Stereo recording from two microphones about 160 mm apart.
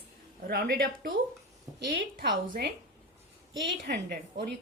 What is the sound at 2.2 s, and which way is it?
Speech, 90° right.